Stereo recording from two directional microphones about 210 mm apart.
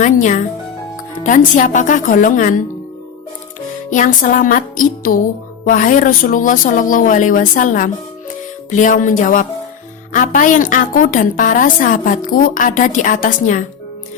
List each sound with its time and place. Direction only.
0.0 s a woman's voice: 35° left (ahead or behind)
3.8 s a woman's voice: 35° left (ahead or behind)